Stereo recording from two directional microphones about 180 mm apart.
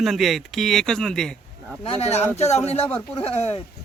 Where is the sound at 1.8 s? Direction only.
35° left (ahead or behind).